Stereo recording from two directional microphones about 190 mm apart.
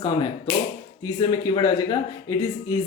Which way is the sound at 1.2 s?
20° left (ahead or behind).